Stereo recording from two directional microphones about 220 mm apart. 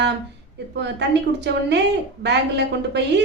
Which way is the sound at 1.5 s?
50° right (ahead or behind).